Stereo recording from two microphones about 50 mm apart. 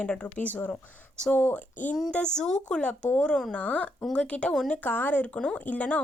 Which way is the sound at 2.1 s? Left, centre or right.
Centre.